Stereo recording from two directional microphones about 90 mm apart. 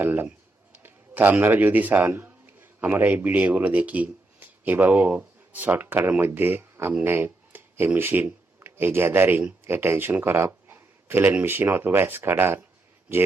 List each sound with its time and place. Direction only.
0.0 s a man's voice: 20° right (ahead or behind)